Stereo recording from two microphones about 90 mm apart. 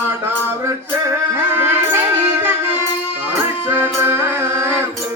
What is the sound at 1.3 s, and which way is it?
Music, 25° right (ahead or behind).